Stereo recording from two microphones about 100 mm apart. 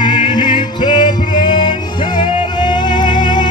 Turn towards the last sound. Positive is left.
turn(degrees=50)  # may be behind; listen again after turning